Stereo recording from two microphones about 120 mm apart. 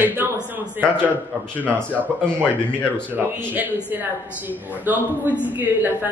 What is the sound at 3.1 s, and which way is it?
A woman's voice, 15° right (ahead or behind).